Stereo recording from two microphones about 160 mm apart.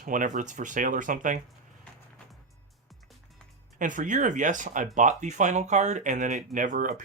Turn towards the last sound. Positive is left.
turn(degrees=-50)  # may be behind; listen again after turning